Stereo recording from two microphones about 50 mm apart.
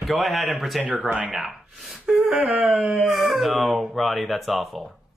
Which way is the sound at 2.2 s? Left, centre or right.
Centre.